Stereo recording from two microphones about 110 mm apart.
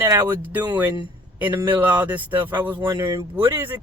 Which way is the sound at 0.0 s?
25° right (ahead or behind).